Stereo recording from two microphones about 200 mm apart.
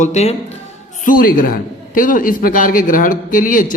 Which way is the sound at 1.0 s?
45° left (ahead or behind).